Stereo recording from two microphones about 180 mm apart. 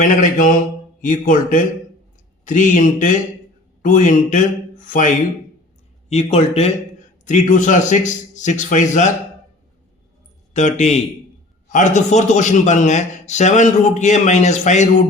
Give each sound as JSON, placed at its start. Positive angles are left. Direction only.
{"t": 0.0, "sound": "a man's voice", "side_deg": 45}
{"t": 10.5, "sound": "a man's voice", "side_deg": 40}